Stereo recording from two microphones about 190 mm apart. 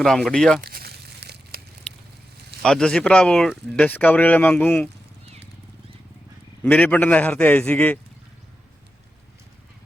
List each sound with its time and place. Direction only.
0.0 s speech: centre (ahead or behind)
0.6 s crumpling: 55° right (ahead or behind)
2.6 s speech: 5° left (ahead or behind)
6.7 s a man's voice: 10° left (ahead or behind)